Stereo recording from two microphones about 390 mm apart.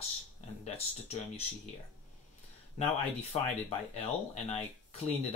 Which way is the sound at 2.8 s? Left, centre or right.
Centre.